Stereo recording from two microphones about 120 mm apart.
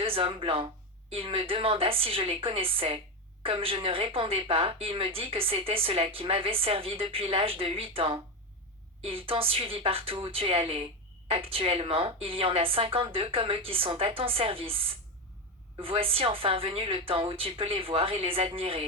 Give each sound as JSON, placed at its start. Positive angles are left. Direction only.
{"t": 0.0, "sound": "speech", "side_deg": -50}